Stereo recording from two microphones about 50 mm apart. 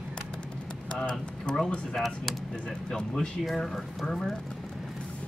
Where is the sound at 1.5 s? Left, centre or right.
Centre.